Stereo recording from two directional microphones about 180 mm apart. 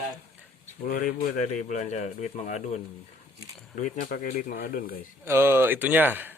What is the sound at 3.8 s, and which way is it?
Speech, 50° left (ahead or behind).